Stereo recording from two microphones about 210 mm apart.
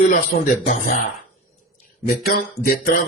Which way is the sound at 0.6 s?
35° left (ahead or behind).